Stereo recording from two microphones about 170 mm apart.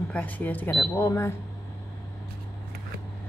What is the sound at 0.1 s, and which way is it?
Speech, 10° left (ahead or behind).